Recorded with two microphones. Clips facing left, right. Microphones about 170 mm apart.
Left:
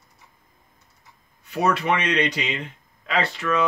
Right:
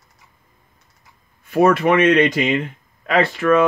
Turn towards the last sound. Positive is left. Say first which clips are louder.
# right 8 dB
turn(degrees=-55)  # may be behind; listen again after turning